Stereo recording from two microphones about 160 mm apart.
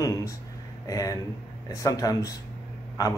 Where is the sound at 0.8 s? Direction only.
20° left (ahead or behind).